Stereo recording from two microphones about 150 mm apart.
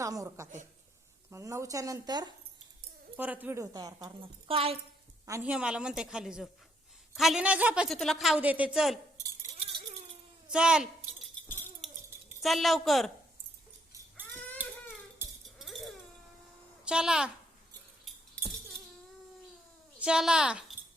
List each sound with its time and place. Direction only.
0.0 s a woman's voice: 20° right (ahead or behind)
3.2 s speech: 10° right (ahead or behind)
4.4 s a woman's voice: 40° right (ahead or behind)
5.4 s a woman's voice: 10° right (ahead or behind)
7.9 s a woman's voice: centre (ahead or behind)
10.5 s a sound: 5° right (ahead or behind)
12.4 s a woman's voice: centre (ahead or behind)
15.5 s a sound: centre (ahead or behind)
16.8 s a woman's voice: 5° right (ahead or behind)
20.0 s speech: 5° right (ahead or behind)